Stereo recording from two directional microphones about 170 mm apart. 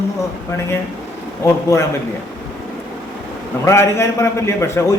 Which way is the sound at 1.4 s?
20° left (ahead or behind).